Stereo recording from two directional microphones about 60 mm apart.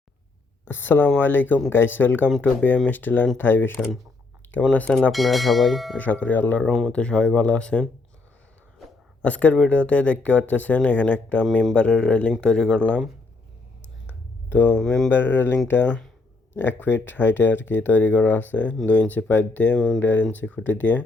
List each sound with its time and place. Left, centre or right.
0.6 s speech: left
4.4 s a sound: left
5.1 s speech: centre
6.0 s speech: left
9.2 s speech: left
14.8 s speech: centre
15.1 s speech: left